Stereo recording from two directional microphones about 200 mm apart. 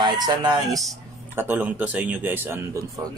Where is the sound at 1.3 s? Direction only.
10° right (ahead or behind).